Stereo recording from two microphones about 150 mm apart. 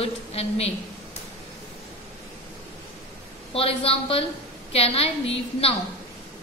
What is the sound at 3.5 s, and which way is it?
A woman's voice, 40° left (ahead or behind).